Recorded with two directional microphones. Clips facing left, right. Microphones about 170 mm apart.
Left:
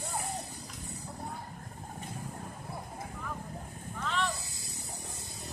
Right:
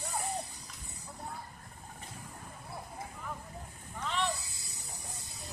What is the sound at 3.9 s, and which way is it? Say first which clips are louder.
Snake: left 1 dB; 20° right (ahead or behind).